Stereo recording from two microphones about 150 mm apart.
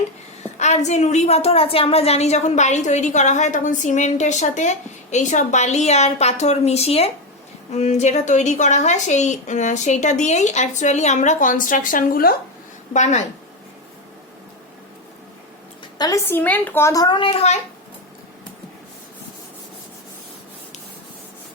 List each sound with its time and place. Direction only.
0.6 s a woman's voice: 50° left (ahead or behind); by 12.4 s 80° left
12.9 s a woman's voice: 50° left (ahead or behind)
16.0 s a woman's voice: 20° left (ahead or behind); by 17.6 s 40° left (ahead or behind)